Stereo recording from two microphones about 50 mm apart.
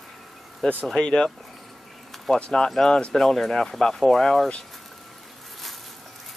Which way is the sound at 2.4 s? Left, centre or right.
Centre.